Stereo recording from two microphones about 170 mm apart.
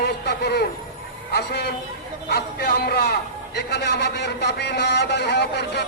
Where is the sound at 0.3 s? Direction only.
70° left (ahead or behind).